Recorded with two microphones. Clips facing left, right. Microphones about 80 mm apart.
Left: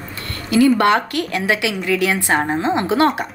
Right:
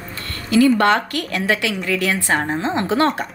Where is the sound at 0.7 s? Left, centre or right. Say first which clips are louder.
Left 1 dB; left.